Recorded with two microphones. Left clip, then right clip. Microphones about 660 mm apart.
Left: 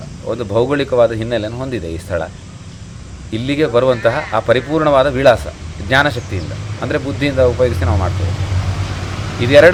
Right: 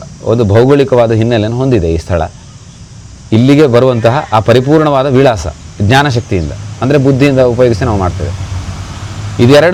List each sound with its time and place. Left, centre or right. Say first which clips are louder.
0.3 s a man's voice: right 8 dB; right
3.3 s a man's voice: right 8 dB; right
9.5 s a man's voice: right 1 dB; right